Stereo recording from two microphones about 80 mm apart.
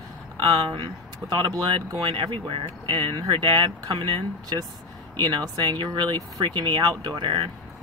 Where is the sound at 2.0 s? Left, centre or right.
Right.